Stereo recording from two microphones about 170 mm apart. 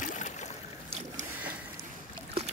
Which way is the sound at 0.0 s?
50° left (ahead or behind).